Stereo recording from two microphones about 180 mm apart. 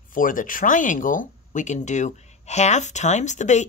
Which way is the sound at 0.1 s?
50° left (ahead or behind).